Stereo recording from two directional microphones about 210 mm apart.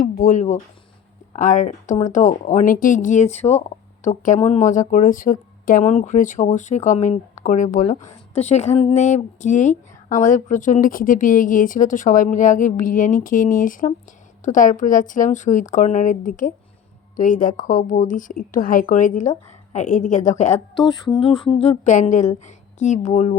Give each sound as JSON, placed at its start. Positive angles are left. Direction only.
{"t": 0.0, "sound": "a woman's voice", "side_deg": 40}
{"t": 20.7, "sound": "a woman's voice", "side_deg": 20}